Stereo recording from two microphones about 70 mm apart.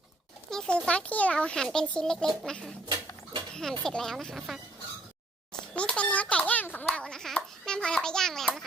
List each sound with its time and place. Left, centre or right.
0.5 s a sound: centre
0.9 s a child's voice: centre
5.7 s a child's voice: centre
7.0 s a child's voice: centre